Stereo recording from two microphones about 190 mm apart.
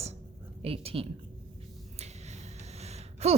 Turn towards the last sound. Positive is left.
turn(degrees=-35)  # may be behind; listen again after turning